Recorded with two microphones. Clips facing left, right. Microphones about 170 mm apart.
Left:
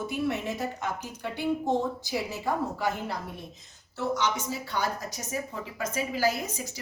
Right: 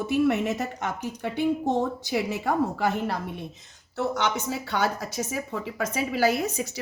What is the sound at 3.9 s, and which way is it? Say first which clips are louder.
Speech: right 2 dB; 60° right (ahead or behind).